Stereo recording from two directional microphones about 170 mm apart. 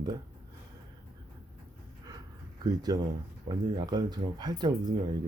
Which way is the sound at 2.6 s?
20° right (ahead or behind).